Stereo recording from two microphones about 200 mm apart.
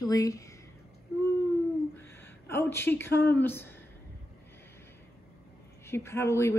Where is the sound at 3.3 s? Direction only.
10° left (ahead or behind).